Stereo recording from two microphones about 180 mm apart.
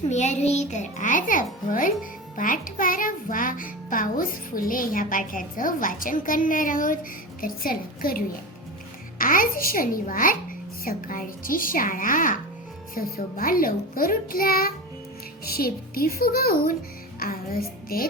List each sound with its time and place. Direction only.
0.1 s a child's voice: 40° left (ahead or behind); by 16.7 s 55° left (ahead or behind)
17.2 s music: 55° left (ahead or behind)
17.8 s a woman's voice: 55° left (ahead or behind)